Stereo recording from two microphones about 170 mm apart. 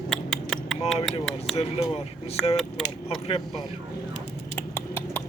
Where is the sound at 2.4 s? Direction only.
Centre (ahead or behind).